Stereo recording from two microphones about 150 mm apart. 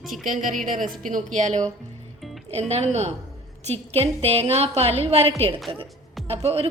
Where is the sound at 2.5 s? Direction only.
45° right (ahead or behind).